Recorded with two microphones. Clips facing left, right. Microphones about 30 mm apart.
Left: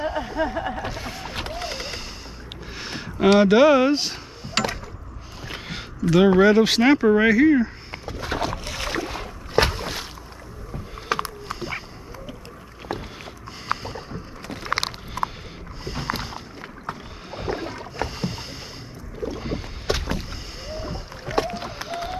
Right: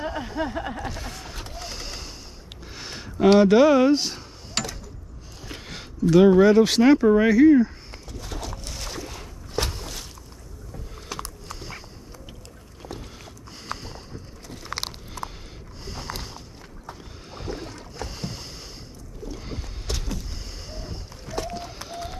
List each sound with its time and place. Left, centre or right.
0.0 s a sound: centre
1.3 s vehicle: left
1.7 s a sound: left
3.3 s speech: centre
8.2 s boat: left
11.1 s boat: left
12.9 s rowboat: left
14.7 s vehicle: left
15.8 s boat: left
19.2 s rowboat: left
19.9 s rowboat: left
20.6 s rowboat: centre
21.3 s run: left